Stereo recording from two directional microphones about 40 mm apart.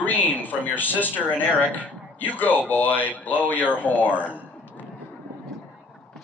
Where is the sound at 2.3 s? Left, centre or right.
Left.